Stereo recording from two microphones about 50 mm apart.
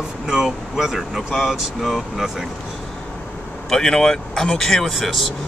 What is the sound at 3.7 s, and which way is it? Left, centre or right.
A man's voice, centre.